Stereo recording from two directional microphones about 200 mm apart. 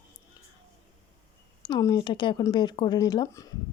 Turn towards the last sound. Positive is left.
turn(degrees=20)  # may be behind; listen again after turning